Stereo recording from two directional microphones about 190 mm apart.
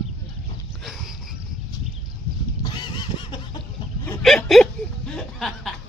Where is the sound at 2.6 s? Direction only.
25° left (ahead or behind).